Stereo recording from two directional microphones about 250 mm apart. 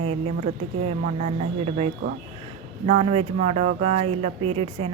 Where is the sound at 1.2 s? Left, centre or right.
Right.